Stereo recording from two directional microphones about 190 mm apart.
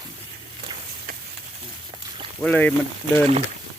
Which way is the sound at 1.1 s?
45° right (ahead or behind).